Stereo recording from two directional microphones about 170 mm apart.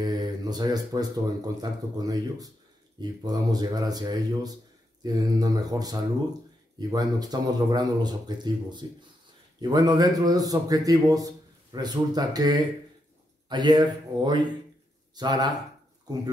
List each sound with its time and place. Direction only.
0.0 s speech: 25° right (ahead or behind)